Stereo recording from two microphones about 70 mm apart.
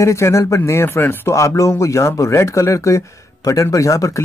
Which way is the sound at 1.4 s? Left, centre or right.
Left.